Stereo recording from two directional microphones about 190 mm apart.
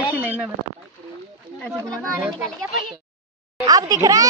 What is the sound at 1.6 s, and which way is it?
Speech, 5° left (ahead or behind).